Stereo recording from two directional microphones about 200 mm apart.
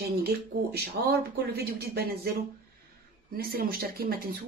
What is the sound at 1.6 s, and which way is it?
Speech, 55° right (ahead or behind).